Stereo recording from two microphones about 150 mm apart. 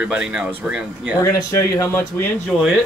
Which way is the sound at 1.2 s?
20° left (ahead or behind).